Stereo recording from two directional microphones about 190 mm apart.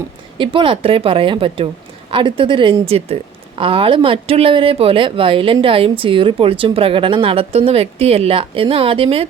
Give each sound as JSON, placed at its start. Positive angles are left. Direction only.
{"t": 0.3, "sound": "speech", "side_deg": -25}